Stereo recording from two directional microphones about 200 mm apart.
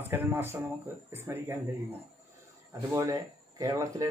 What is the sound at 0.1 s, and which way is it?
Speech, 10° right (ahead or behind).